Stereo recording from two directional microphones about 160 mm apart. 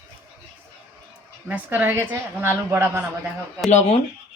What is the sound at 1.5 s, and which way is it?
A woman's voice, 10° right (ahead or behind).